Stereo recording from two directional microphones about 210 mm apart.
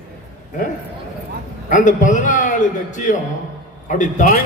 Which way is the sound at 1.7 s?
40° left (ahead or behind).